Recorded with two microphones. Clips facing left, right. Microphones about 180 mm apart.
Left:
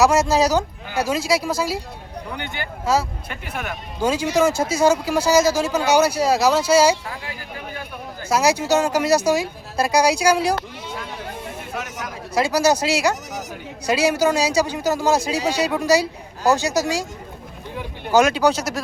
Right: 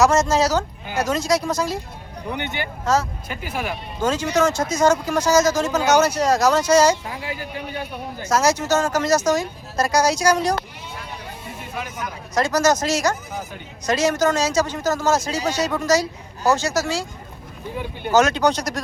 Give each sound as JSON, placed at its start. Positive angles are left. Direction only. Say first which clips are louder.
{"t": 0.0, "sound": "speech", "louder": "left 1 dB", "side_deg": 10}
{"t": 2.3, "sound": "a man's voice", "louder": "right 5 dB", "side_deg": -20}
{"t": 2.8, "sound": "speech", "louder": "even", "side_deg": 10}
{"t": 3.2, "sound": "speech", "louder": "right 2 dB", "side_deg": -5}
{"t": 4.0, "sound": "speech", "louder": "left 1 dB", "side_deg": 10}
{"t": 8.3, "sound": "speech", "louder": "left 1 dB", "side_deg": 10}
{"t": 12.3, "sound": "speech", "louder": "left 1 dB", "side_deg": 10}
{"t": 18.1, "sound": "speech", "louder": "left 1 dB", "side_deg": 10}